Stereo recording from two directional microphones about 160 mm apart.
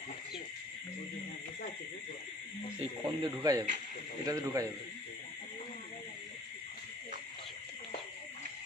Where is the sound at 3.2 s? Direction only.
25° right (ahead or behind).